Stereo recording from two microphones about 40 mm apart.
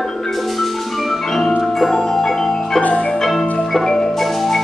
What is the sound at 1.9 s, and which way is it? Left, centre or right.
Marimba, centre.